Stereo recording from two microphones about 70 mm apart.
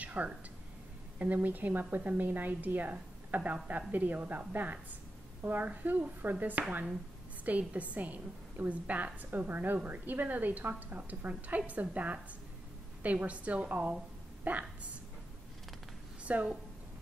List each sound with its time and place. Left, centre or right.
0.0 s a sound: right
1.2 s a woman's voice: right
16.3 s a woman's voice: centre